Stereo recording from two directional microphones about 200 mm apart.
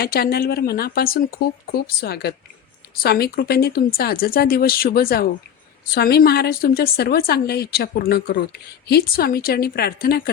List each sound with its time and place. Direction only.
0.0 s a woman's voice: 50° left (ahead or behind)